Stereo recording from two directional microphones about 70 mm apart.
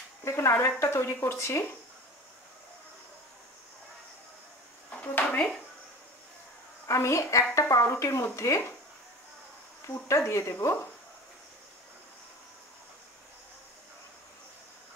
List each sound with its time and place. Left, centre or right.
0.2 s speech: left
5.0 s dishes: left
6.9 s speech: left
10.0 s speech: left